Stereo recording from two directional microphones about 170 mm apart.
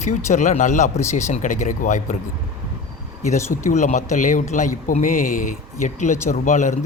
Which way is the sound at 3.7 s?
45° left (ahead or behind).